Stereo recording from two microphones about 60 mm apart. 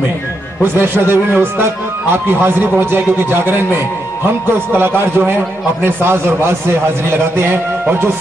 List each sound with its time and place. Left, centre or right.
0.7 s speech: right
4.7 s a man's voice: right